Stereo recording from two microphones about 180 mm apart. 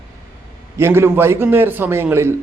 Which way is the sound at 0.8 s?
15° right (ahead or behind).